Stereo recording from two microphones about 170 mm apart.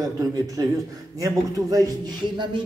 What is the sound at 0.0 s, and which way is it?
A man's voice, 20° right (ahead or behind).